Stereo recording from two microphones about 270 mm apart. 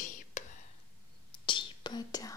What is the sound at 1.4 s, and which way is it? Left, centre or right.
Whispering, centre.